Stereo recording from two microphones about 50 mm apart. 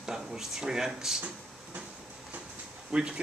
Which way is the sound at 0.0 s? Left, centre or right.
Centre.